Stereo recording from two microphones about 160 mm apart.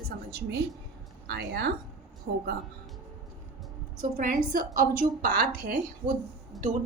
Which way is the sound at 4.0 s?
55° right (ahead or behind).